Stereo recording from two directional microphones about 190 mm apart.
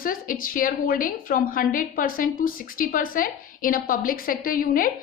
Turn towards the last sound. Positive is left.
turn(degrees=45)  # may be behind; listen again after turning